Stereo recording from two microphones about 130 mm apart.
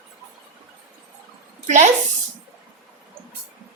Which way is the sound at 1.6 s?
65° right (ahead or behind).